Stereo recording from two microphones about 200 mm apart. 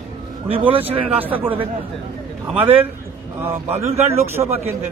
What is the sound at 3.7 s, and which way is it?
Speech, 30° right (ahead or behind).